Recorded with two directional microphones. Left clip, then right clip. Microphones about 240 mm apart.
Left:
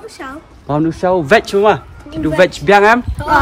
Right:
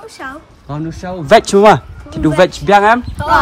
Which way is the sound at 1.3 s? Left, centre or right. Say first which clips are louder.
Right 6 dB; right.